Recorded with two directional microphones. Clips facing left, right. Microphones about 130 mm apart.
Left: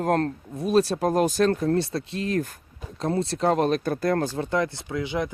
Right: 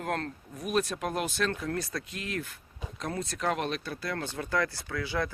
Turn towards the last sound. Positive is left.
turn(degrees=20)  # may be behind; listen again after turning